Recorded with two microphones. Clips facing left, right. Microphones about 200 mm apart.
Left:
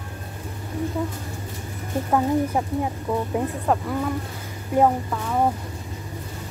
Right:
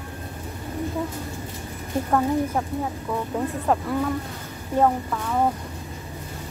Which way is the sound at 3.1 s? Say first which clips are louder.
Left 4 dB; 20° left (ahead or behind).